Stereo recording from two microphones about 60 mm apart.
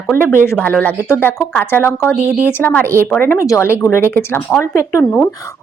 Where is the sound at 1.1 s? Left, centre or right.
Left.